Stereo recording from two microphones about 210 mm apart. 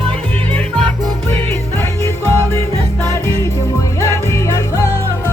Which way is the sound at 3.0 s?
15° left (ahead or behind).